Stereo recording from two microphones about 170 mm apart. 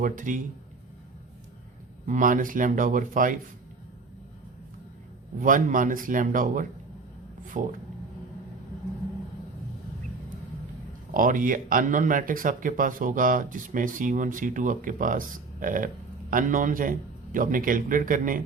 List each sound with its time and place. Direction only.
0.0 s speech: 50° right (ahead or behind)
2.0 s speech: 50° right (ahead or behind)
5.4 s speech: 50° right (ahead or behind)
11.1 s speech: 50° right (ahead or behind)